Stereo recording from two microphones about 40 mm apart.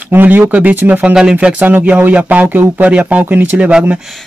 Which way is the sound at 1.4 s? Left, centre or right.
Right.